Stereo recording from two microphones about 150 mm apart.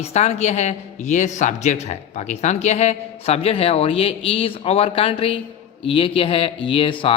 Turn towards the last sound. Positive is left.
turn(degrees=35)  # may be behind; listen again after turning